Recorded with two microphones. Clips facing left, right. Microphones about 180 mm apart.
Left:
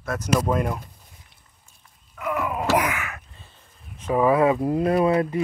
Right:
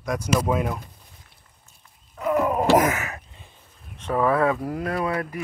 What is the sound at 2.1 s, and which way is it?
Groan, 35° right (ahead or behind).